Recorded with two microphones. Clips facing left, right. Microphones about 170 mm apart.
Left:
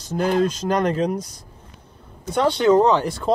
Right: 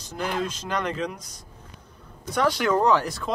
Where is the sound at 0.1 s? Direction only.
40° left (ahead or behind).